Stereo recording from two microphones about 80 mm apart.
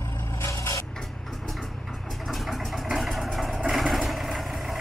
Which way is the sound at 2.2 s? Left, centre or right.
Centre.